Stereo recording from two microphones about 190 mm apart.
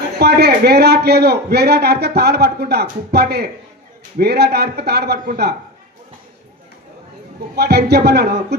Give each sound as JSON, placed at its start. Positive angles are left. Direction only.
{"t": 0.2, "sound": "a man's voice", "side_deg": -60}
{"t": 7.5, "sound": "a man's voice", "side_deg": -60}